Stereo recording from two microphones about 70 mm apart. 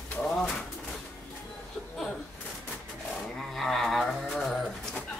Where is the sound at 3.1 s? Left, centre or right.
Centre.